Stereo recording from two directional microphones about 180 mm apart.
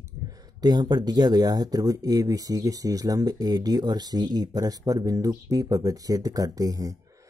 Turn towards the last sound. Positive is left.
turn(degrees=-20)  # may be behind; listen again after turning